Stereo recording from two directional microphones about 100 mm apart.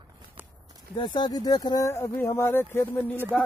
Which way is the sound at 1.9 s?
25° left (ahead or behind).